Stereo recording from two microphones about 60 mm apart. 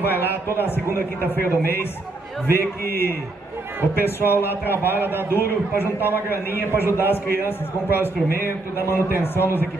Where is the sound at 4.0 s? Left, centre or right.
Left.